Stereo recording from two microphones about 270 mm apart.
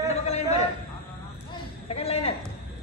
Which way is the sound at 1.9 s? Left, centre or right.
Left.